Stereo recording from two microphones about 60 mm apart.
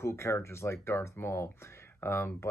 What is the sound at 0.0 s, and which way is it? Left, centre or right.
Speech, left.